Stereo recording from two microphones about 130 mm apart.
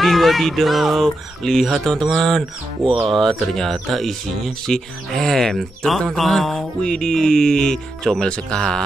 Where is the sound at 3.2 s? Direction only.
Centre (ahead or behind).